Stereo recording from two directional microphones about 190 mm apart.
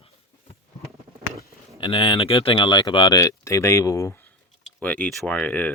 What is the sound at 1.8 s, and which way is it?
Speech, 30° left (ahead or behind).